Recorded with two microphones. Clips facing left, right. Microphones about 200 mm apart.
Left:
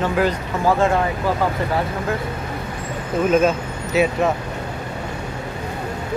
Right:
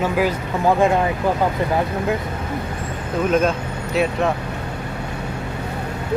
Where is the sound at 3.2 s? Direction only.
Centre (ahead or behind).